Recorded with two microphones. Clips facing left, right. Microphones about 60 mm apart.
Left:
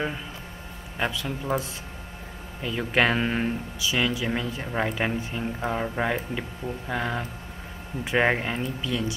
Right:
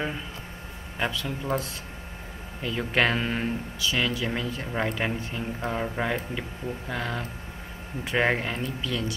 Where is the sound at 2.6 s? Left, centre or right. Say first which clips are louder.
Left 1 dB; centre.